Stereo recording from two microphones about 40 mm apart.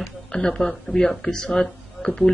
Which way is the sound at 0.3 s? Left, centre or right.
Centre.